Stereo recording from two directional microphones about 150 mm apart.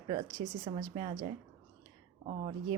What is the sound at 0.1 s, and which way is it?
A woman's voice, 40° right (ahead or behind).